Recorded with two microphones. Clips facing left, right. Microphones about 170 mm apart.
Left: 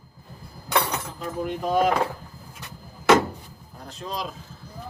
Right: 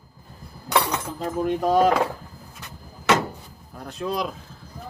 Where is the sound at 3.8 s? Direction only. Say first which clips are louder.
Right 6 dB; 60° right (ahead or behind).